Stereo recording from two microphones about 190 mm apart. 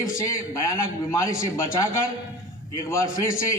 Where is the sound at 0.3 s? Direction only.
15° left (ahead or behind).